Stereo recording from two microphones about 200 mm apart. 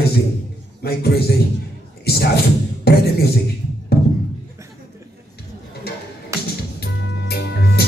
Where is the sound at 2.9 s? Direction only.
50° left (ahead or behind).